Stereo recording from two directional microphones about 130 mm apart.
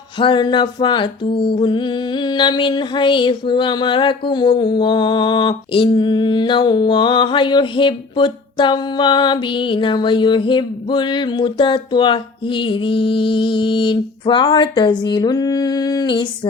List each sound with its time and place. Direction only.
0.2 s music: 40° left (ahead or behind)